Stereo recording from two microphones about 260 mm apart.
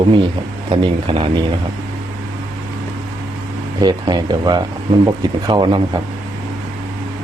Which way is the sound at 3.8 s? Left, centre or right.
Centre.